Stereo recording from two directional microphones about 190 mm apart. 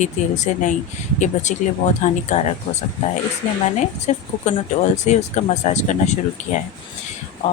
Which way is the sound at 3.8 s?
40° left (ahead or behind).